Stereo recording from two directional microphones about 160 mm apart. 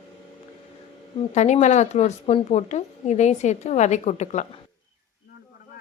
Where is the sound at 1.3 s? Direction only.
45° left (ahead or behind).